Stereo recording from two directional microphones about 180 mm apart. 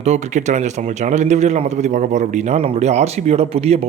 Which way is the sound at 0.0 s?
40° right (ahead or behind).